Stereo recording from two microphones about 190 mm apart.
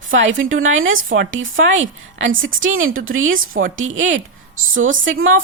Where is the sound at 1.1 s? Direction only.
80° right.